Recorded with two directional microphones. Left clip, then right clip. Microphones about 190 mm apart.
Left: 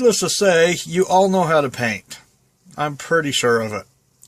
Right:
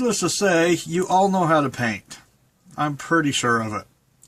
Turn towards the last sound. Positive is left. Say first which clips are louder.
# left 4 dB
turn(degrees=40)  # may be behind; listen again after turning